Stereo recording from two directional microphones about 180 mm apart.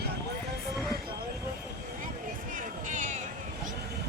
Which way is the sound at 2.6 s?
45° right (ahead or behind).